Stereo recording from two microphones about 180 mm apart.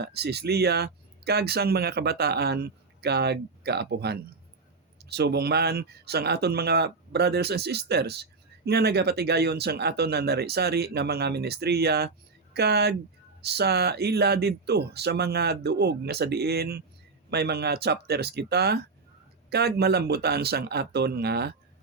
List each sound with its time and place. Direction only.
0.0 s speech: 65° right (ahead or behind)